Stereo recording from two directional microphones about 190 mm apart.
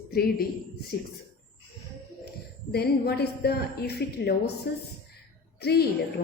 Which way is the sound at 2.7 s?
55° left (ahead or behind).